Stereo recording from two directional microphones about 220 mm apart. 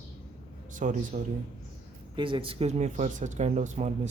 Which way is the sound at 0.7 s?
35° right (ahead or behind).